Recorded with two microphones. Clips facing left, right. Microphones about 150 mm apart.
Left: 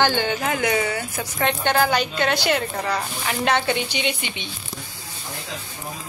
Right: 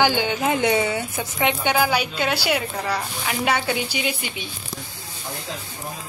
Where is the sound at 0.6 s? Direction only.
25° right (ahead or behind).